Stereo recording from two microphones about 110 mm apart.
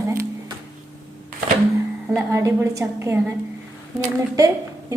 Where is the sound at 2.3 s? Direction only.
25° right (ahead or behind).